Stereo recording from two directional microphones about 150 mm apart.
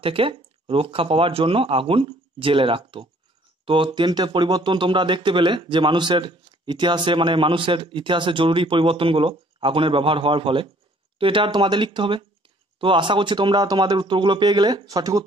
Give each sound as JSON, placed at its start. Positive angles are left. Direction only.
{"t": 0.0, "sound": "speech", "side_deg": -35}